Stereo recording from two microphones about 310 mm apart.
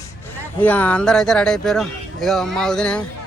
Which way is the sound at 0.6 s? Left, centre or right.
Centre.